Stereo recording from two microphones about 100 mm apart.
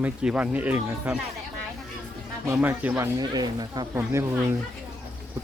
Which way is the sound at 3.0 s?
40° right (ahead or behind).